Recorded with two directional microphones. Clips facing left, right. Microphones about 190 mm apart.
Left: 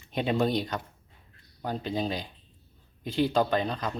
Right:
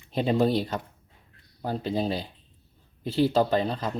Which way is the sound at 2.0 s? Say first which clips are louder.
Right 3 dB; 35° right (ahead or behind).